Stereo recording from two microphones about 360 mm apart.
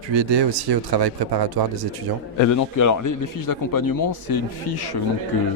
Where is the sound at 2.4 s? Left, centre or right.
Left.